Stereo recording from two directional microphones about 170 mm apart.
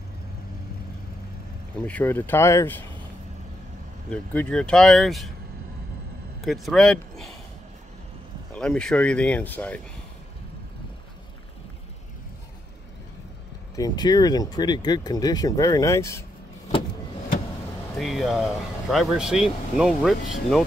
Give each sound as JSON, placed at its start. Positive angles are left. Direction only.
{"t": 1.9, "sound": "speech", "side_deg": 10}
{"t": 4.1, "sound": "speech", "side_deg": 10}
{"t": 6.4, "sound": "speech", "side_deg": 0}
{"t": 8.5, "sound": "speech", "side_deg": 5}
{"t": 13.7, "sound": "speech", "side_deg": 25}
{"t": 17.9, "sound": "speech", "side_deg": 0}